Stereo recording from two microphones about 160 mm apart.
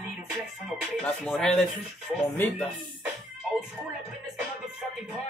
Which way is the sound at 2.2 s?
15° left (ahead or behind).